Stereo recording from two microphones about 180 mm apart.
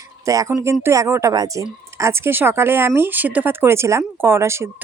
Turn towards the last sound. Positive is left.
turn(degrees=-15)  # may be behind; listen again after turning